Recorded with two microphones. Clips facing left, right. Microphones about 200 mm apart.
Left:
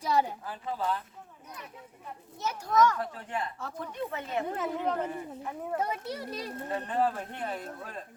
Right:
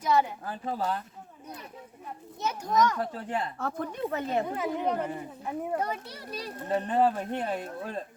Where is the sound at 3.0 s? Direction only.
35° right (ahead or behind).